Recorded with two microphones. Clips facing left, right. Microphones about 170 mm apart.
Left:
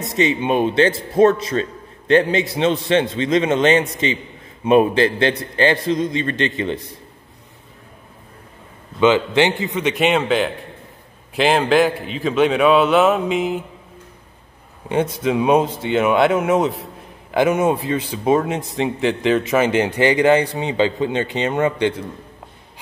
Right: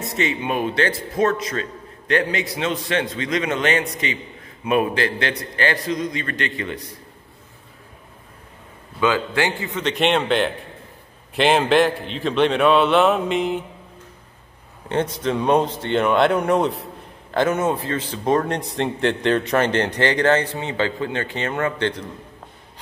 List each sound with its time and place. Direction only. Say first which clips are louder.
0.0 s a man's voice: left 5 dB; 20° left (ahead or behind)
9.0 s a man's voice: left 5 dB; 20° left (ahead or behind); by 13.7 s centre (ahead or behind)
15.2 s a man's voice: left 3 dB; 10° left (ahead or behind)